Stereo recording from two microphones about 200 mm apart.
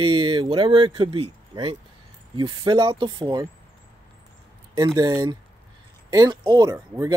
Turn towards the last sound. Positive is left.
turn(degrees=-20)  # may be behind; listen again after turning